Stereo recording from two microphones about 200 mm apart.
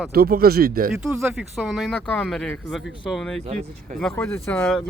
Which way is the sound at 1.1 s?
10° right (ahead or behind).